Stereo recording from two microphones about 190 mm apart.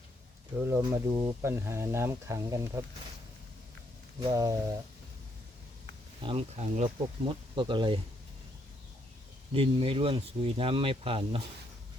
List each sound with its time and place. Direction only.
0.8 s speech: 25° right (ahead or behind)
1.4 s speech: 15° right (ahead or behind)
4.2 s speech: 20° right (ahead or behind)
6.2 s speech: 35° right (ahead or behind)
9.5 s speech: 30° right (ahead or behind)